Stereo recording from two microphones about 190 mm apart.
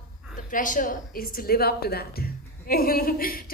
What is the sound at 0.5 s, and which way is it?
A woman's voice, 45° left (ahead or behind).